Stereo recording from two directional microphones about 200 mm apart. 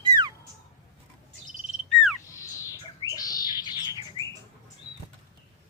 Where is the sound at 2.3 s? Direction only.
15° left (ahead or behind).